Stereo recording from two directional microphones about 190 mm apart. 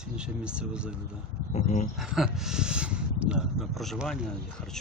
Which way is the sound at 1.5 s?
40° left (ahead or behind).